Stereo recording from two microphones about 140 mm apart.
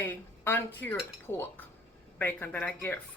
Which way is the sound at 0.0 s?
15° left (ahead or behind).